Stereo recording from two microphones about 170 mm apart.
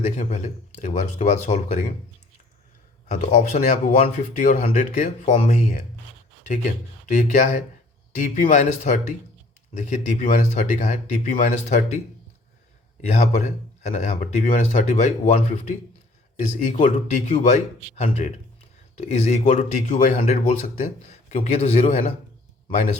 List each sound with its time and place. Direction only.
0.0 s speech: 45° left (ahead or behind)
3.1 s speech: 45° left (ahead or behind)
7.2 s speech: 45° left (ahead or behind)
13.1 s speech: 40° left (ahead or behind)
16.8 s a man's voice: 45° left (ahead or behind)